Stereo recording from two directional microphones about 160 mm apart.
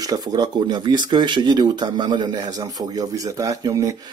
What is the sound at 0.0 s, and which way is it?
Speech, 25° right (ahead or behind).